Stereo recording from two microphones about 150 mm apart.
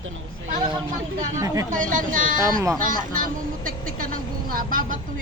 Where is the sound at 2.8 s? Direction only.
65° right (ahead or behind).